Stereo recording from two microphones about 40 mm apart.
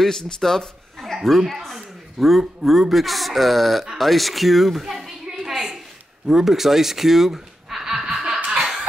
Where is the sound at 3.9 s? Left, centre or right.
Centre.